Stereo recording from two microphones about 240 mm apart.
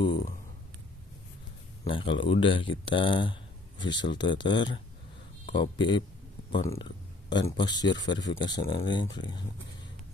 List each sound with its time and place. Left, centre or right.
1.9 s speech: left